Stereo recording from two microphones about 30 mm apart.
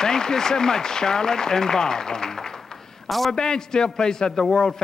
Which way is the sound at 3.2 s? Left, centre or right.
Left.